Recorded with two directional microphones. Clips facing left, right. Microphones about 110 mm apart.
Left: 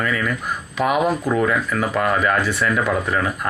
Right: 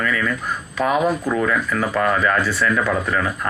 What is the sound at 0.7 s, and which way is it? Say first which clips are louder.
Speech: even; 10° left (ahead or behind).